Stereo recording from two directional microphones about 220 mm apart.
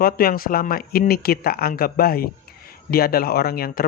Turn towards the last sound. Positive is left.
turn(degrees=40)  # may be behind; listen again after turning